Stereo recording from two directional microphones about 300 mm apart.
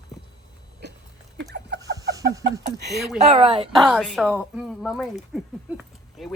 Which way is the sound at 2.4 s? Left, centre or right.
Right.